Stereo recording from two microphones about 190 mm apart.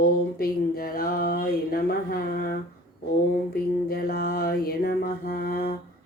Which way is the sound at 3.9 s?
50° left (ahead or behind).